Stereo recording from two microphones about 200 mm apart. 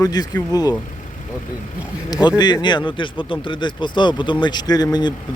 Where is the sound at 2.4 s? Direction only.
20° left (ahead or behind).